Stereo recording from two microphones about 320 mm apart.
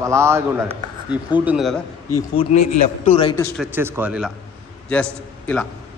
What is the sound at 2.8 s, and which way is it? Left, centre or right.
Speech, centre.